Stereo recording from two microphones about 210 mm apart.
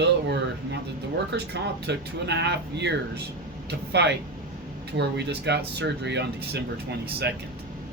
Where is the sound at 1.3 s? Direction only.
55° right (ahead or behind).